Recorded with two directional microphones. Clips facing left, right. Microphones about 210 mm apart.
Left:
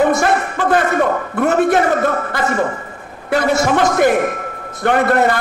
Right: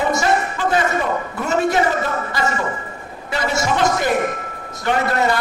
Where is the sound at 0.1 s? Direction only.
55° left (ahead or behind).